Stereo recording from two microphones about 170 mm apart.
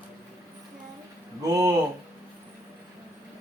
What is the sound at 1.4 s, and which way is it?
Speech, 15° right (ahead or behind).